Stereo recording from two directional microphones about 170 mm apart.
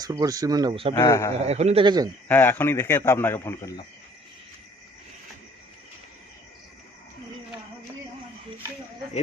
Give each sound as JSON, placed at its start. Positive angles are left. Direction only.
{"t": 0.0, "sound": "speech", "side_deg": -20}
{"t": 0.9, "sound": "a man's voice", "side_deg": 20}
{"t": 1.4, "sound": "a man's voice", "side_deg": -40}
{"t": 2.2, "sound": "a man's voice", "side_deg": 10}